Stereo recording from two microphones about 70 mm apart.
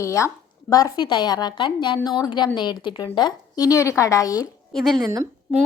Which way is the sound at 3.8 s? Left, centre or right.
Left.